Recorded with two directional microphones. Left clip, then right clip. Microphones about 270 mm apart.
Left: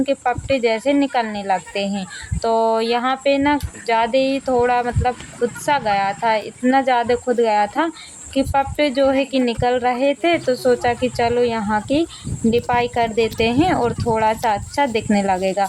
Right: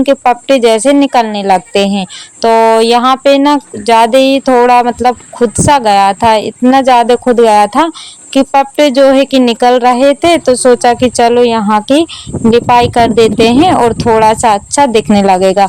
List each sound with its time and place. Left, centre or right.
0.0 s speech: right